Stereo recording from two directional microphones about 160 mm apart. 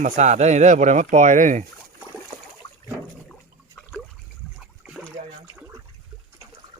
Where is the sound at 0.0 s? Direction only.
45° right (ahead or behind).